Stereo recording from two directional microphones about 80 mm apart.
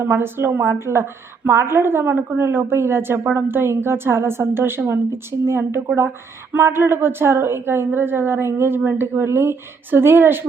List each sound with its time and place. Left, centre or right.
0.0 s a woman's voice: right